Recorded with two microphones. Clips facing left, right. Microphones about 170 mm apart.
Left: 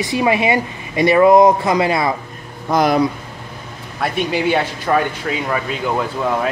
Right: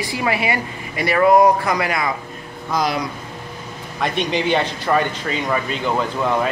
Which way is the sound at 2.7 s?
55° left (ahead or behind).